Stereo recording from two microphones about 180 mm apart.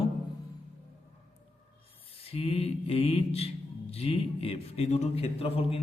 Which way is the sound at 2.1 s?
30° left (ahead or behind).